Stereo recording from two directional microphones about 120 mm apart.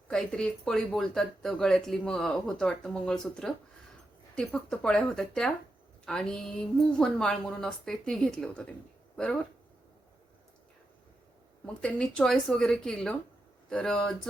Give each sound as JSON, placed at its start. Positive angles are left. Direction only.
{"t": 0.1, "sound": "speech", "side_deg": 5}
{"t": 11.6, "sound": "speech", "side_deg": 10}